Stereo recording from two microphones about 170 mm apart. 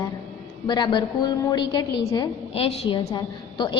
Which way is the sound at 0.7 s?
25° left (ahead or behind).